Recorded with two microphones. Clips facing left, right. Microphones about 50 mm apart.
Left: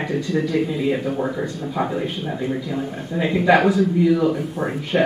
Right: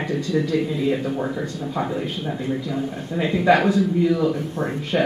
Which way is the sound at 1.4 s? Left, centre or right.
Centre.